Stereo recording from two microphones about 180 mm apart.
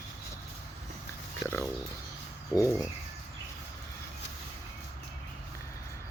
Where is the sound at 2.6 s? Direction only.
Centre (ahead or behind).